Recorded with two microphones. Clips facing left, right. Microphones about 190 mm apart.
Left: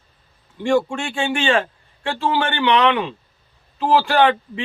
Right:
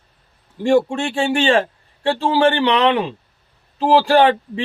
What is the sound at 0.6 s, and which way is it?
Speech, 35° right (ahead or behind).